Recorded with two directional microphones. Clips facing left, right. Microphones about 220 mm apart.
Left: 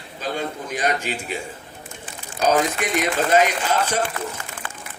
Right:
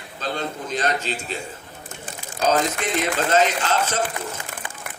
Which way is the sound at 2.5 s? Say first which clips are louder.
Left 1 dB; 10° left (ahead or behind).